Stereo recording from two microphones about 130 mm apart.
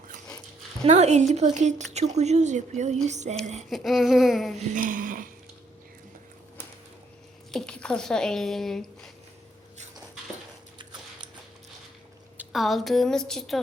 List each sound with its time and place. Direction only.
0.9 s speech: 60° right (ahead or behind)
3.7 s a woman's voice: centre (ahead or behind)
4.5 s speech: 90° right
7.5 s speech: 5° left (ahead or behind)
12.5 s a woman's voice: centre (ahead or behind)